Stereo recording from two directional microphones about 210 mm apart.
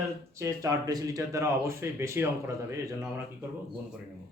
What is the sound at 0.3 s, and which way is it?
Speech, 15° right (ahead or behind).